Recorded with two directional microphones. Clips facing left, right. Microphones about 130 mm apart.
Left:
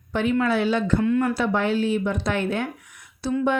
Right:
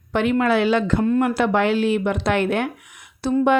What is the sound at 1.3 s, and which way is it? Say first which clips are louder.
Speech: right 4 dB; 80° right.